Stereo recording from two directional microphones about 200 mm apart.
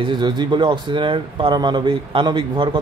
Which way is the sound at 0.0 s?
20° right (ahead or behind).